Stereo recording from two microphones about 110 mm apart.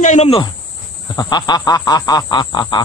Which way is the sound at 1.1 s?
40° left (ahead or behind).